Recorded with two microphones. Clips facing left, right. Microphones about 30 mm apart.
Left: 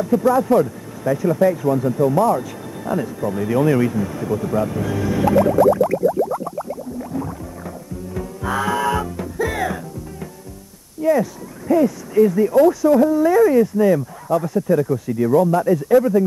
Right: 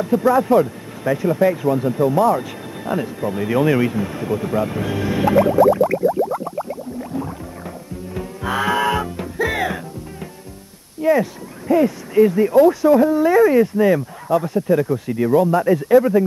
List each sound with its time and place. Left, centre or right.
0.0 s speech: right
6.3 s a sound: right
8.1 s music: right
11.0 s speech: right